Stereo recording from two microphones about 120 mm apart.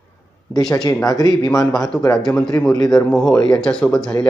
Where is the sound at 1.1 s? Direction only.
30° left (ahead or behind).